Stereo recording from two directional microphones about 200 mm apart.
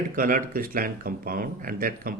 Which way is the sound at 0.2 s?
45° right (ahead or behind).